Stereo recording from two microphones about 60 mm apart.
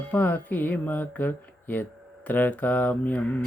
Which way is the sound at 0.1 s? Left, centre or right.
Left.